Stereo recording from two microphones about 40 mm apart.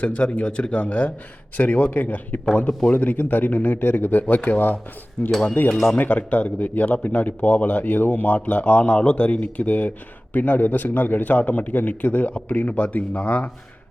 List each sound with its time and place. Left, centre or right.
0.0 s a man's voice: left
5.2 s a man's voice: left
6.0 s a man's voice: left